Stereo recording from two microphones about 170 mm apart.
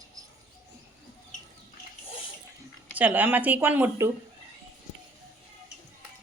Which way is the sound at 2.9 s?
10° right (ahead or behind).